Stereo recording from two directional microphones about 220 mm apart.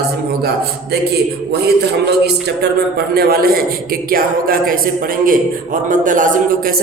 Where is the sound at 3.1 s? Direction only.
45° right (ahead or behind).